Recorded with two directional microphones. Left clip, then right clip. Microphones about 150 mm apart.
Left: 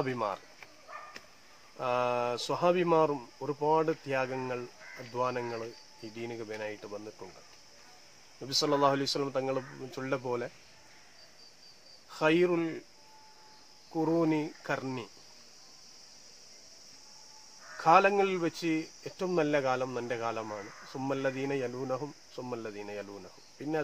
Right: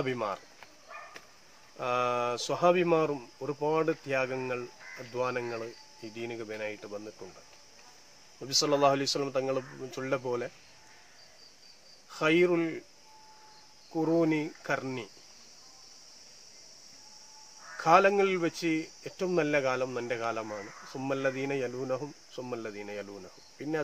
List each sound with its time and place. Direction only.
0.0 s speech: 20° right (ahead or behind)
1.8 s speech: 20° right (ahead or behind)
8.4 s speech: 20° right (ahead or behind)
12.1 s speech: 15° right (ahead or behind)
13.9 s speech: 15° right (ahead or behind)
17.7 s speech: 20° right (ahead or behind)